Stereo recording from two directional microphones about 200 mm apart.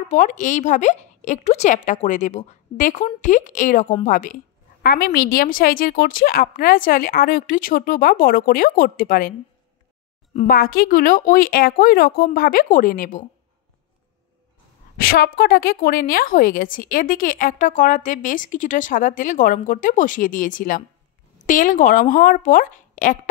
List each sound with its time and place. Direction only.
0.1 s a woman's voice: 40° left (ahead or behind)
10.3 s a woman's voice: 45° left (ahead or behind)
15.0 s a woman's voice: 50° left (ahead or behind)